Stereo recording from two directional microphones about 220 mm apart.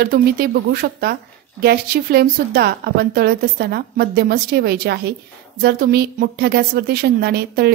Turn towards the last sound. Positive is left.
turn(degrees=-45)  # may be behind; listen again after turning